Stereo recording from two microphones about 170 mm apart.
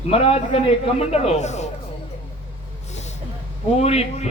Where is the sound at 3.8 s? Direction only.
40° left (ahead or behind).